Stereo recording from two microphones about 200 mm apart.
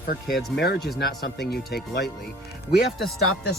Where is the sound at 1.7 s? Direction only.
55° left (ahead or behind).